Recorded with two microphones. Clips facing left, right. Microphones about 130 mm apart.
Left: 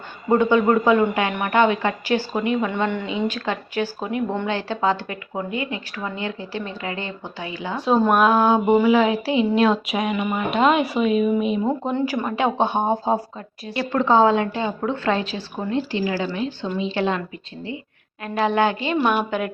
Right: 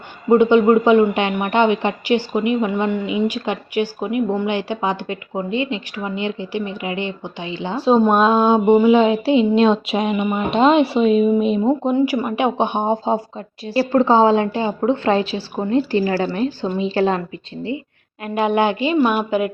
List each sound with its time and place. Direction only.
0.3 s speech: 20° right (ahead or behind)
11.9 s speech: 10° right (ahead or behind)
12.8 s speech: 5° left (ahead or behind)
13.7 s a woman's voice: 30° right (ahead or behind)
16.0 s a woman's voice: 55° right (ahead or behind); by 17.7 s 30° right (ahead or behind)
18.5 s speech: 20° right (ahead or behind)